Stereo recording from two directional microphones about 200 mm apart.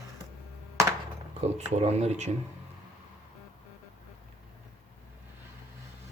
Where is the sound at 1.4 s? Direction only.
35° right (ahead or behind).